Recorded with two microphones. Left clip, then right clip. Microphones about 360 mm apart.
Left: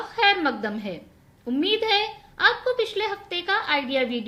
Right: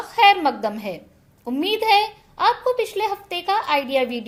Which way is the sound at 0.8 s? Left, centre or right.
Centre.